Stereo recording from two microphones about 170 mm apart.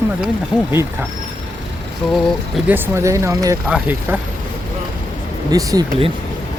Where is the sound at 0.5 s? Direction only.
5° right (ahead or behind).